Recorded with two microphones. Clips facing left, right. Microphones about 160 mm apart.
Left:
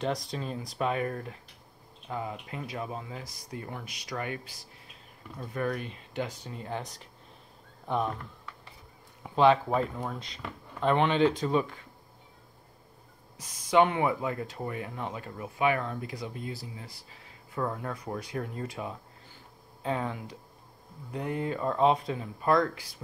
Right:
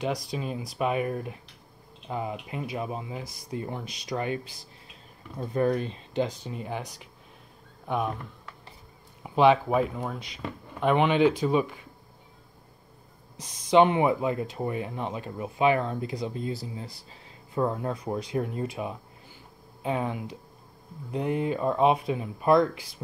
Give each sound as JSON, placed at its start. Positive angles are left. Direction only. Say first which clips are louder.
{"t": 0.0, "sound": "speech", "louder": "right 2 dB", "side_deg": -5}
{"t": 5.4, "sound": "speech", "louder": "right 7 dB", "side_deg": -30}
{"t": 6.2, "sound": "speech", "louder": "right 5 dB", "side_deg": -15}
{"t": 7.9, "sound": "speech", "louder": "right 1 dB", "side_deg": -10}
{"t": 9.2, "sound": "speech", "louder": "right 2 dB", "side_deg": -15}
{"t": 13.4, "sound": "speech", "louder": "right 4 dB", "side_deg": -25}